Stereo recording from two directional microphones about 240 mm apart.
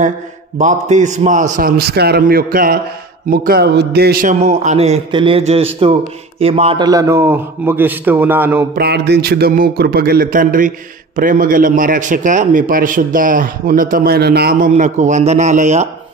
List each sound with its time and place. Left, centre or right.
0.6 s a man's voice: right; by 8.6 s centre
8.7 s a man's voice: right